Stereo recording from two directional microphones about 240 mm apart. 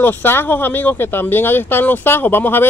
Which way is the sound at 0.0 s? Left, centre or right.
Centre.